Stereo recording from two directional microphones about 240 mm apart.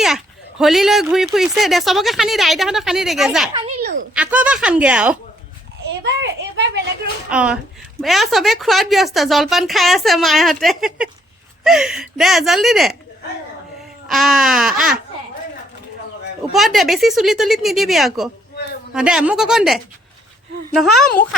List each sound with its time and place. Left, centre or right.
0.6 s a woman's voice: centre
3.5 s a child's voice: right
3.8 s speech: right
4.1 s a woman's voice: centre
7.3 s a woman's voice: centre
14.1 s a woman's voice: centre
16.5 s a woman's voice: centre